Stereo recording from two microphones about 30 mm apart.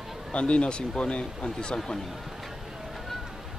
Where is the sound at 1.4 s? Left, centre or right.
Left.